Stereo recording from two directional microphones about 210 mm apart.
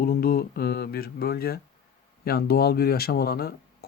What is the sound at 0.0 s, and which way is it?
Mantra, 45° left (ahead or behind).